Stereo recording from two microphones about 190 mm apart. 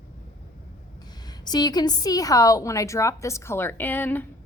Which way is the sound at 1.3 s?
20° left (ahead or behind).